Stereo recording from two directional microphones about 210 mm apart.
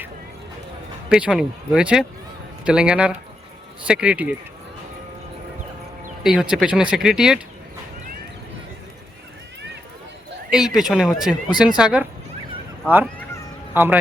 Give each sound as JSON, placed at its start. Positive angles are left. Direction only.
{"t": 1.1, "sound": "speech", "side_deg": -5}
{"t": 6.2, "sound": "speech", "side_deg": -5}
{"t": 10.5, "sound": "speech", "side_deg": 0}
{"t": 13.7, "sound": "a man's voice", "side_deg": -10}